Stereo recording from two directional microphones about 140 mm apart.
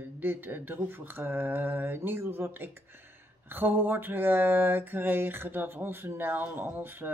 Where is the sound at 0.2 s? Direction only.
15° right (ahead or behind).